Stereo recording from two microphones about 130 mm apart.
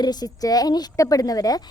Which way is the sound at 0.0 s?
30° left (ahead or behind).